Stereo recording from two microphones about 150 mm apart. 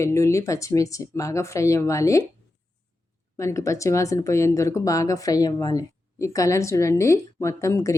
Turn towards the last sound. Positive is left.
turn(degrees=20)  # may be behind; listen again after turning